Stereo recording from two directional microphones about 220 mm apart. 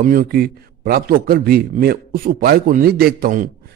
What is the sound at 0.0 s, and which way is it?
A man's voice, 40° right (ahead or behind).